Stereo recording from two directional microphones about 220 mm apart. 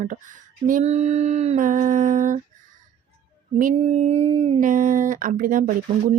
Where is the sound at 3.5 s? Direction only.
35° right (ahead or behind).